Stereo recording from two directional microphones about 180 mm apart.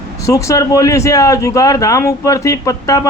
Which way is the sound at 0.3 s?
15° left (ahead or behind).